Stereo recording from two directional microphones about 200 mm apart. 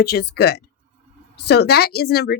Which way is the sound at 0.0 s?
55° left (ahead or behind).